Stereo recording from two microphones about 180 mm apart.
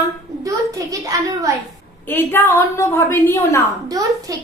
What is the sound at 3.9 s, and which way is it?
Speech, 20° right (ahead or behind).